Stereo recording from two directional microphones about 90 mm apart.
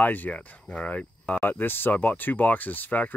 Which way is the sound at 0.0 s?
20° left (ahead or behind).